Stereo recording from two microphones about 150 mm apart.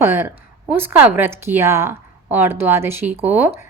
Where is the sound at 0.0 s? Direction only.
15° right (ahead or behind).